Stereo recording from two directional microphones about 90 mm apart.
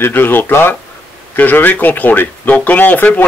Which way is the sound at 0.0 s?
20° left (ahead or behind).